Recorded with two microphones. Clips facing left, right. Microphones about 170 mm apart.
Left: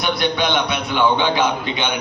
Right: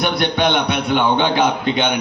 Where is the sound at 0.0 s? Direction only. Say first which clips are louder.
Right 2 dB; 55° right (ahead or behind).